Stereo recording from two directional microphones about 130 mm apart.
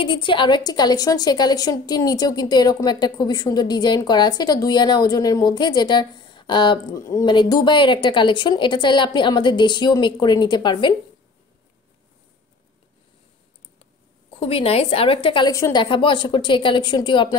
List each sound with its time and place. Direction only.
0.0 s a woman's voice: 40° left (ahead or behind)
7.0 s a woman's voice: 25° left (ahead or behind)
14.4 s a woman's voice: 50° left (ahead or behind)